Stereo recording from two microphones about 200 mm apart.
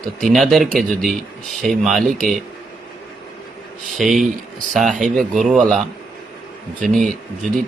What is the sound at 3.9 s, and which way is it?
A man's voice, centre (ahead or behind).